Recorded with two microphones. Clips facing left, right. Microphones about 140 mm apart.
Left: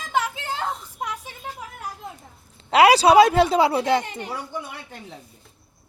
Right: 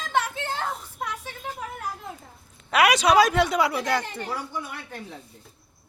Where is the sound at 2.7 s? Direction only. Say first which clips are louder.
Left 5 dB; 30° left (ahead or behind).